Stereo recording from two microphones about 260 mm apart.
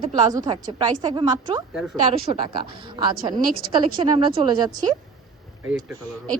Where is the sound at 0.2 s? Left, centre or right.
Centre.